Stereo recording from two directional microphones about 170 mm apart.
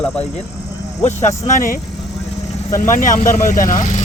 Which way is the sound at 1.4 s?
50° left (ahead or behind).